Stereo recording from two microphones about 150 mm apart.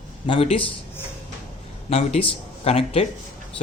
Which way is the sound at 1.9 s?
45° left (ahead or behind).